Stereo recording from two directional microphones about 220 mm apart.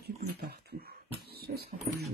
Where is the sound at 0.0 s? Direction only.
45° right (ahead or behind).